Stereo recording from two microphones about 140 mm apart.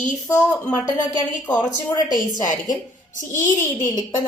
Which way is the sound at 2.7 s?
65° left (ahead or behind).